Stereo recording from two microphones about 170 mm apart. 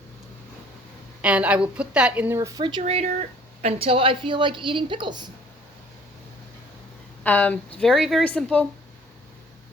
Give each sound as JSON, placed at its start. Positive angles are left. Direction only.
{"t": 1.2, "sound": "speech", "side_deg": -5}
{"t": 2.8, "sound": "a woman's voice", "side_deg": -40}
{"t": 7.3, "sound": "speech", "side_deg": 10}